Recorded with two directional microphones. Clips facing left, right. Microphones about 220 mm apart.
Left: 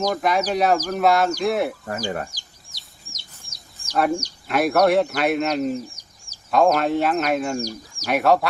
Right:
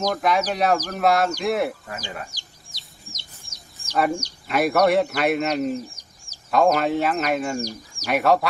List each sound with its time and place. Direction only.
0.1 s speech: centre (ahead or behind)
2.0 s speech: 50° left (ahead or behind)
2.3 s chicken: 10° left (ahead or behind)
3.9 s speech: 5° left (ahead or behind)